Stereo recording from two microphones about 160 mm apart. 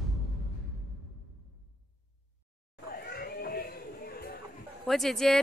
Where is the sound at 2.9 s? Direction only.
75° left (ahead or behind).